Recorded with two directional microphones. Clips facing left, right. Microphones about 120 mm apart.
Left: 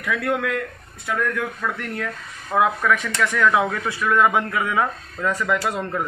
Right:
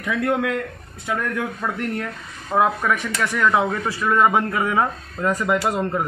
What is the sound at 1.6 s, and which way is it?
Speech, 25° right (ahead or behind).